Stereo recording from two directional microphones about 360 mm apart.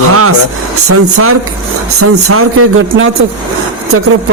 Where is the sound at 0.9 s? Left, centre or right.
Right.